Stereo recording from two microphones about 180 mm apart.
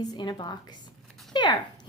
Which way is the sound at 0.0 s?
20° left (ahead or behind).